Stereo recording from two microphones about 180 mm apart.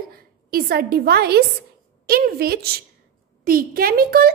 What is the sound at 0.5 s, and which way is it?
A woman's voice, 55° right (ahead or behind).